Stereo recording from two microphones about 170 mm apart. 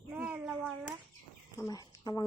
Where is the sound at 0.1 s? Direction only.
10° right (ahead or behind).